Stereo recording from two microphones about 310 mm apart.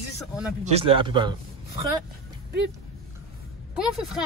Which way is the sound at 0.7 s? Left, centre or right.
Centre.